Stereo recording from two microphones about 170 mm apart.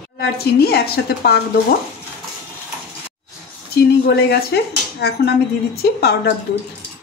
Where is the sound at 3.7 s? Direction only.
70° left (ahead or behind).